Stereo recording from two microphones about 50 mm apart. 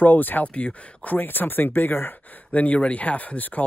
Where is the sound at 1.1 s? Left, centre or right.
Left.